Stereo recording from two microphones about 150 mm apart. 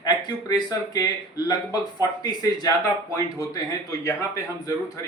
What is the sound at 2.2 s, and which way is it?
A man's voice, 25° left (ahead or behind).